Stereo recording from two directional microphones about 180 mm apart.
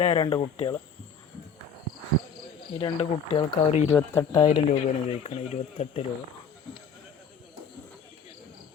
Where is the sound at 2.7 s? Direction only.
35° left (ahead or behind).